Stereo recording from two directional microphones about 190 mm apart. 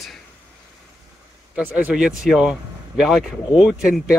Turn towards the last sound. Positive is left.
turn(degrees=-5)  # may be behind; listen again after turning